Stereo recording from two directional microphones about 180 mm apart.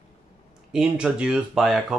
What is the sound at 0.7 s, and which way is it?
Speech, 5° right (ahead or behind).